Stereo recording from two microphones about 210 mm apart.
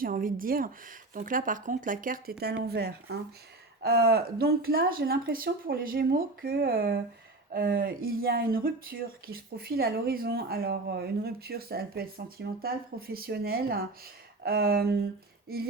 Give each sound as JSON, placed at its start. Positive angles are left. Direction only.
{"t": 0.0, "sound": "speech", "side_deg": -40}